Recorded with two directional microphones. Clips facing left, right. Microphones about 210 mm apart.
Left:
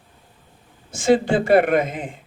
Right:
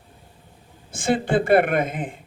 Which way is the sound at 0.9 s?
55° right (ahead or behind).